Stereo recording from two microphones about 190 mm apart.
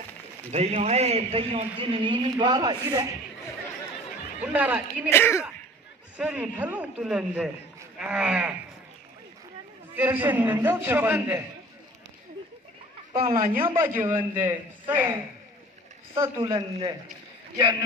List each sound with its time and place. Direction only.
0.5 s a man's voice: 35° right (ahead or behind)
4.4 s a man's voice: 5° right (ahead or behind)
5.1 s speech: 10° left (ahead or behind)
6.1 s a man's voice: 5° right (ahead or behind)
9.9 s a man's voice: 10° right (ahead or behind)
13.1 s speech: 50° right (ahead or behind)
13.6 s a man's voice: 10° right (ahead or behind)
16.4 s a man's voice: 15° right (ahead or behind)